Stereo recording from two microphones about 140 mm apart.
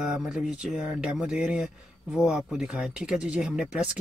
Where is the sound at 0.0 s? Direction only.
5° right (ahead or behind).